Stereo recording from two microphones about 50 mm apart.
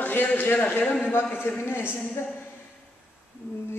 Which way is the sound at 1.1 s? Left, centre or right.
Left.